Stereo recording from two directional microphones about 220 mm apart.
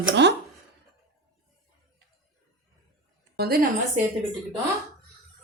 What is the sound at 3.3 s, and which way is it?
Speech, 45° right (ahead or behind).